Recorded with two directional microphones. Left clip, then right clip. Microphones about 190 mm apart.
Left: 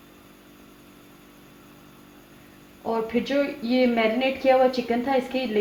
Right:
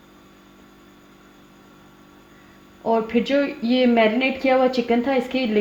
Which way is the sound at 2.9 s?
40° right (ahead or behind).